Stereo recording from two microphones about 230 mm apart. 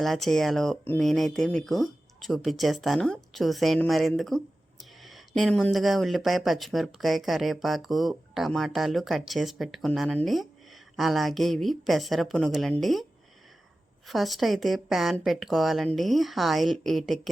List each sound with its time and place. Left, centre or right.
0.0 s speech: centre
14.1 s speech: centre